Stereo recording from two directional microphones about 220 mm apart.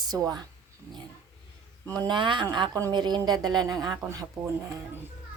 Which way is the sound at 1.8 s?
20° right (ahead or behind).